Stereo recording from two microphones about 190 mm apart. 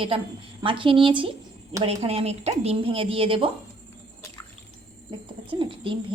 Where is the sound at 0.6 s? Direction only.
25° right (ahead or behind).